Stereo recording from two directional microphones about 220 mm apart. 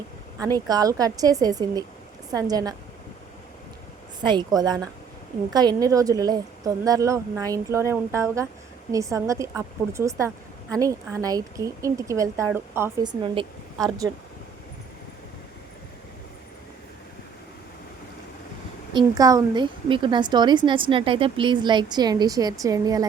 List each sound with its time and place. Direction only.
0.3 s a woman's voice: 15° right (ahead or behind)
4.2 s a woman's voice: 20° right (ahead or behind)
18.9 s a woman's voice: 15° right (ahead or behind)